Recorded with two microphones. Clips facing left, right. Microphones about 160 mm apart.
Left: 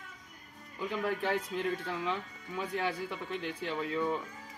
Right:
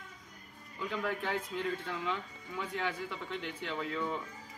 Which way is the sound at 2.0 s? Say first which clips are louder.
Left 2 dB; 20° left (ahead or behind).